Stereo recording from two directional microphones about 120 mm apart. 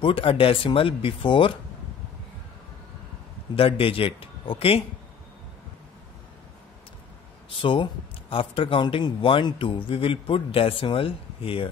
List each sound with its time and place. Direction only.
0.0 s speech: 50° left (ahead or behind)
3.5 s speech: 50° left (ahead or behind)
7.4 s speech: 45° left (ahead or behind)